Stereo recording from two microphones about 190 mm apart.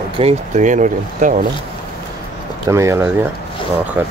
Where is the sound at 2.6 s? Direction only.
15° right (ahead or behind).